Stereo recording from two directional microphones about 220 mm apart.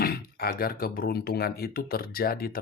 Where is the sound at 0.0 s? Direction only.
45° left (ahead or behind).